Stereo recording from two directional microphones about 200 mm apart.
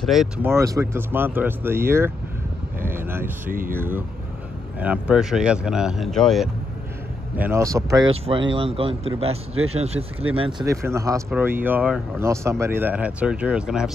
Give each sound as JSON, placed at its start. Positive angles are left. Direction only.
{"t": 0.0, "sound": "speech", "side_deg": 0}
{"t": 0.5, "sound": "speech", "side_deg": -15}
{"t": 3.4, "sound": "speech", "side_deg": -45}
{"t": 3.7, "sound": "speech", "side_deg": -10}
{"t": 7.3, "sound": "speech", "side_deg": -10}
{"t": 10.6, "sound": "speech", "side_deg": -15}